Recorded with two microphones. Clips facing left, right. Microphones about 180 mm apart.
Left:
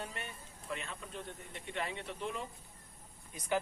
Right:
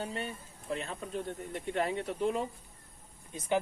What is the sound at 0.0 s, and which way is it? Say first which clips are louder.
Speech: right 7 dB; 30° right (ahead or behind).